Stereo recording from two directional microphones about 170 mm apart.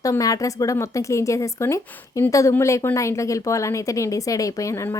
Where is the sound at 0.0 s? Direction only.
20° left (ahead or behind).